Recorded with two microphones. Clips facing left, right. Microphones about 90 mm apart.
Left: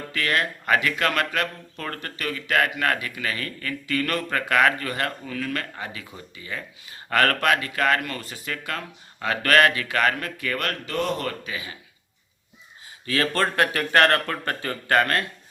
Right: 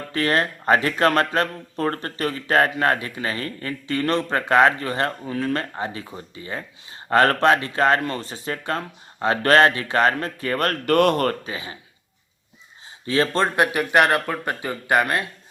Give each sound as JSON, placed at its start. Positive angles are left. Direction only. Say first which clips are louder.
{"t": 0.1, "sound": "speech", "louder": "right 4 dB", "side_deg": -35}
{"t": 10.8, "sound": "speech", "louder": "right 12 dB", "side_deg": -60}
{"t": 11.3, "sound": "speech", "louder": "right 5 dB", "side_deg": -30}
{"t": 13.1, "sound": "speech", "louder": "right 3 dB", "side_deg": -25}